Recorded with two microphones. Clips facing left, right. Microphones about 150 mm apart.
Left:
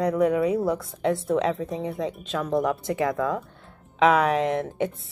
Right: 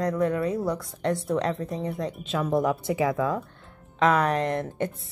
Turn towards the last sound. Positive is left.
turn(degrees=0)  # may be behind; listen again after turning